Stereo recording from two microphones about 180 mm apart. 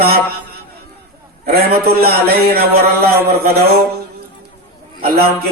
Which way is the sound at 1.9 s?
60° right (ahead or behind).